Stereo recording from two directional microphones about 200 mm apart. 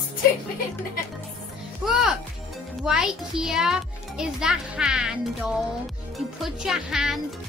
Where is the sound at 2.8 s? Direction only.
5° right (ahead or behind).